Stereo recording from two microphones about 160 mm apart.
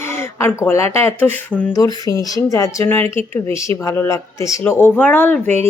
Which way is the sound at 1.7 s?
20° left (ahead or behind).